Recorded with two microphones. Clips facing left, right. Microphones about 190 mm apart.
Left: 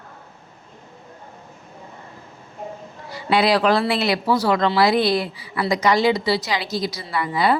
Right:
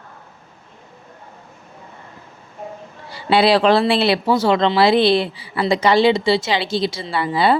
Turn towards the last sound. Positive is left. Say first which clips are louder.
# right 3 dB
turn(degrees=-30)  # may be behind; listen again after turning